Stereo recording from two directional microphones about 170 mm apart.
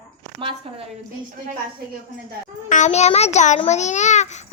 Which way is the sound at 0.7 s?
35° right (ahead or behind).